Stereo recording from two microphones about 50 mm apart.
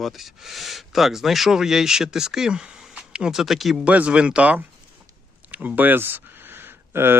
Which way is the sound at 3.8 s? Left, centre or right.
Right.